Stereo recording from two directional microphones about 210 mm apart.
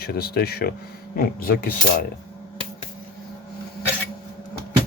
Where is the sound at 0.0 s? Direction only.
45° left (ahead or behind).